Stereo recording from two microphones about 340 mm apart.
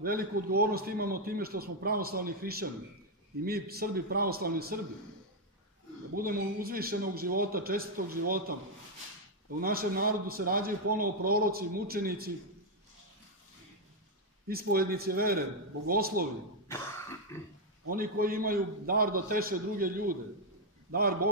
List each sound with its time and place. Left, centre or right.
0.0 s a man's voice: right
6.6 s a man's voice: right
9.6 s a man's voice: right
14.5 s a man's voice: right
16.6 s throat clearing: centre
17.8 s a man's voice: right